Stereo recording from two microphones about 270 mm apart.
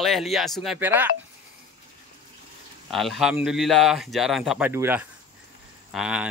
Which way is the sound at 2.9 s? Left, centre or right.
Centre.